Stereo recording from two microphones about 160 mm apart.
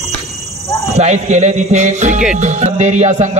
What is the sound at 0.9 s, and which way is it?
A man's voice, 45° right (ahead or behind).